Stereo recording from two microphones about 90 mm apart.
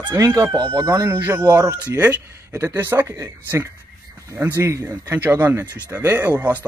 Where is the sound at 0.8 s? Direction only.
30° right (ahead or behind).